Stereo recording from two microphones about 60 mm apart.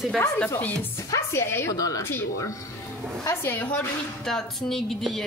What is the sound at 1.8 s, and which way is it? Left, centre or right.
Speech, left.